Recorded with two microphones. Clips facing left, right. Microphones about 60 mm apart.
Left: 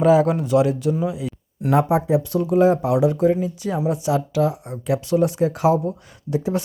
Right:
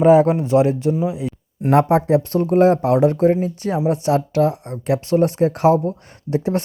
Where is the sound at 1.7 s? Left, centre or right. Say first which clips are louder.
Right 3 dB; right.